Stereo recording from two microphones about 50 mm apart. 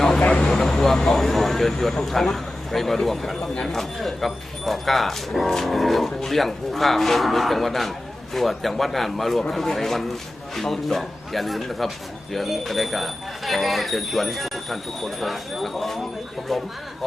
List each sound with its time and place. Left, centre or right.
0.3 s vehicle: centre
0.5 s speech: centre
3.5 s speech: centre
3.8 s speech: centre